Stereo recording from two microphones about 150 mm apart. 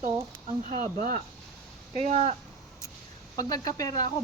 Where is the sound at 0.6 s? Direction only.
55° right (ahead or behind).